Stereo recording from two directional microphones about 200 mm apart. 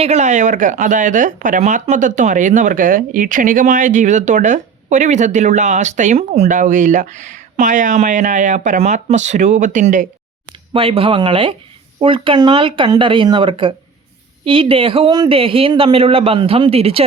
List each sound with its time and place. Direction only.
0.0 s speech: 35° right (ahead or behind)
10.8 s speech: 25° right (ahead or behind)